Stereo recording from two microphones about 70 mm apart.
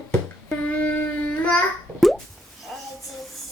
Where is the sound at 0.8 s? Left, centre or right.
Left.